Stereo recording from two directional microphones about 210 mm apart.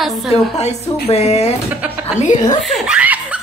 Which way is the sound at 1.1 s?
30° left (ahead or behind).